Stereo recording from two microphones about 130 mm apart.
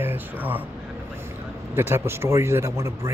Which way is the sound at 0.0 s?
15° right (ahead or behind).